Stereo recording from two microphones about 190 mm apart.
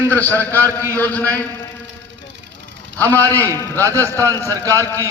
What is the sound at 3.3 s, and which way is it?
Speech, 10° left (ahead or behind).